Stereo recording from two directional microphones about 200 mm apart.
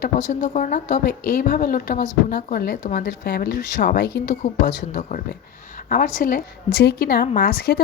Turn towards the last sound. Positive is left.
turn(degrees=50)  # may be behind; listen again after turning